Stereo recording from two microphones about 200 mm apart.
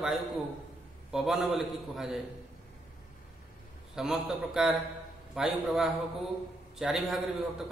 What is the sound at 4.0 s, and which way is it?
A man's voice, centre (ahead or behind).